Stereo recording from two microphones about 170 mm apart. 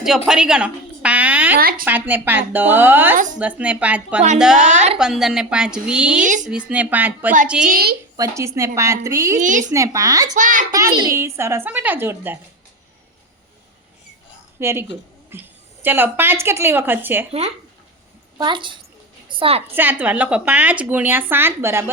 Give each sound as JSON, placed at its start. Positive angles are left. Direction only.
{"t": 0.3, "sound": "speech", "side_deg": -5}
{"t": 1.5, "sound": "a woman's voice", "side_deg": -60}
{"t": 1.8, "sound": "a woman's voice", "side_deg": -10}
{"t": 6.2, "sound": "speech", "side_deg": -50}
{"t": 6.5, "sound": "a woman's voice", "side_deg": -5}
{"t": 8.1, "sound": "speech", "side_deg": -20}
{"t": 9.4, "sound": "speech", "side_deg": -50}
{"t": 9.7, "sound": "speech", "side_deg": -20}
{"t": 10.3, "sound": "speech", "side_deg": -50}
{"t": 10.7, "sound": "speech", "side_deg": -20}
{"t": 14.6, "sound": "speech", "side_deg": -15}
{"t": 18.3, "sound": "a woman's voice", "side_deg": -25}
{"t": 19.7, "sound": "speech", "side_deg": -10}